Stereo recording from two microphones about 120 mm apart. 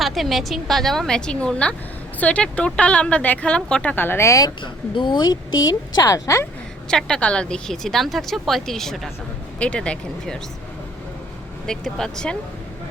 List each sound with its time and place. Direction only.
0.0 s a woman's voice: centre (ahead or behind); by 5.4 s 40° left (ahead or behind)
6.0 s speech: 30° left (ahead or behind)
6.8 s a woman's voice: 5° left (ahead or behind)
11.6 s a woman's voice: 5° left (ahead or behind)